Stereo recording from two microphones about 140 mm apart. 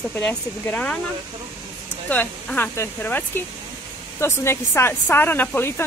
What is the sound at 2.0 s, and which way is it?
Speech, 10° left (ahead or behind).